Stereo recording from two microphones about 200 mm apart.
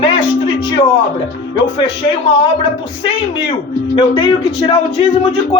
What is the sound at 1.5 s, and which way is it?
Speech, 25° left (ahead or behind).